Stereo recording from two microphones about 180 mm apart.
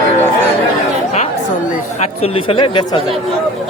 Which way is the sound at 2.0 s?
35° left (ahead or behind).